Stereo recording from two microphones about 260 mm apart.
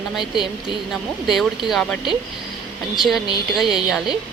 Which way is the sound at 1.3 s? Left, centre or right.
Centre.